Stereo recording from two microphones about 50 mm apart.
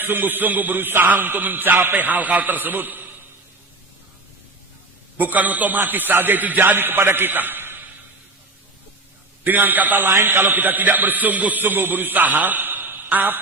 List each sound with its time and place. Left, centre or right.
0.0 s speech: right
5.1 s speech: right
9.4 s a man's voice: right